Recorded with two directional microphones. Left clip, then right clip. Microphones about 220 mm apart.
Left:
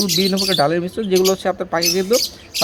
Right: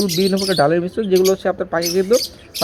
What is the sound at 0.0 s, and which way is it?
Speech, centre (ahead or behind).